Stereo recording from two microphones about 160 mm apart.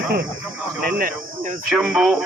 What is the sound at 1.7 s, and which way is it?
Speech, centre (ahead or behind).